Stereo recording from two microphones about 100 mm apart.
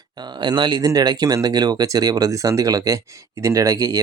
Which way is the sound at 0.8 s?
35° right (ahead or behind).